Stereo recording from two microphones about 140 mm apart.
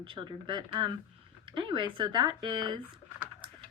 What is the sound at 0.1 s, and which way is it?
Speech, 35° right (ahead or behind).